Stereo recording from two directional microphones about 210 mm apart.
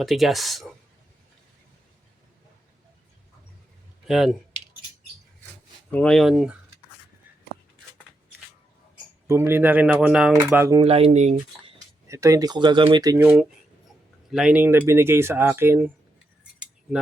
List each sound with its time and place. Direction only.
0.0 s speech: centre (ahead or behind)
4.0 s speech: centre (ahead or behind)
5.9 s speech: 5° left (ahead or behind)
9.2 s speech: 10° right (ahead or behind)
10.8 s speech: 30° right (ahead or behind)
12.0 s speech: 15° right (ahead or behind)
13.2 s speech: 5° right (ahead or behind)